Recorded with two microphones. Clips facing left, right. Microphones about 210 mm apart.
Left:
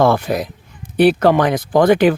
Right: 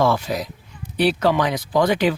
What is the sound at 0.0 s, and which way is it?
Speech, 55° left (ahead or behind).